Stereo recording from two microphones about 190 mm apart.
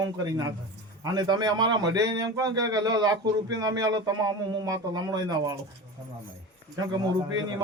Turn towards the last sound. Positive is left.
turn(degrees=-20)  # may be behind; listen again after turning